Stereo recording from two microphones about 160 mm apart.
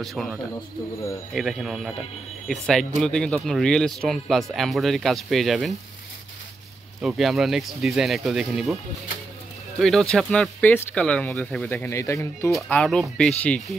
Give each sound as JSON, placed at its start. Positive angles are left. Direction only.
{"t": 0.0, "sound": "speech", "side_deg": 0}
{"t": 0.9, "sound": "speech", "side_deg": 20}
{"t": 1.3, "sound": "speech", "side_deg": 0}
{"t": 7.0, "sound": "speech", "side_deg": 0}
{"t": 9.8, "sound": "speech", "side_deg": 5}
{"t": 12.6, "sound": "speech", "side_deg": 5}